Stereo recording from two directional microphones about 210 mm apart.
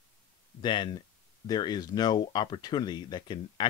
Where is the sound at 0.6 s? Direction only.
20° left (ahead or behind).